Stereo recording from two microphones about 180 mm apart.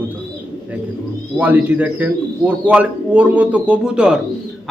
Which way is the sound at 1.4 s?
10° right (ahead or behind).